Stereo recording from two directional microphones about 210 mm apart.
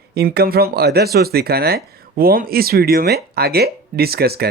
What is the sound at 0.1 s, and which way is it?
Speech, 50° right (ahead or behind).